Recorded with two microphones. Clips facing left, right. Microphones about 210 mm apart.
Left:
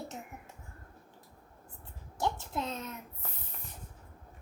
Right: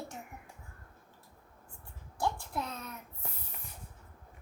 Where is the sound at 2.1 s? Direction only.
20° left (ahead or behind).